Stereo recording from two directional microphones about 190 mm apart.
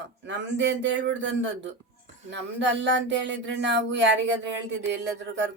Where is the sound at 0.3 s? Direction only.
70° right (ahead or behind).